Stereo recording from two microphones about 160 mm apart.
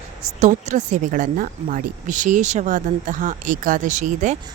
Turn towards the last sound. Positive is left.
turn(degrees=-50)  # may be behind; listen again after turning